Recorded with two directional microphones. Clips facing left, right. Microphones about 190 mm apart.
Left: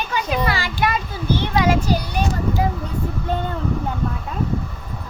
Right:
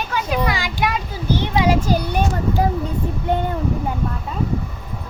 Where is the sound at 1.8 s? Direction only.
50° right (ahead or behind).